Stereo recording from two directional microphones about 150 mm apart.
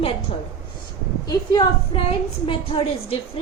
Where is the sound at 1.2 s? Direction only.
25° left (ahead or behind).